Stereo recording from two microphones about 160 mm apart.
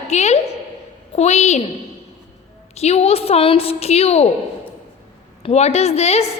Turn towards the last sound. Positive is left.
turn(degrees=40)  # may be behind; listen again after turning